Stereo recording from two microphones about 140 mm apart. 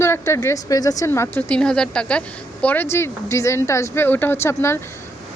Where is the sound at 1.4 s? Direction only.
10° left (ahead or behind).